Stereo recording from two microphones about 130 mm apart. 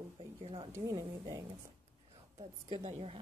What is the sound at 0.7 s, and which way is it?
Speech, 30° right (ahead or behind).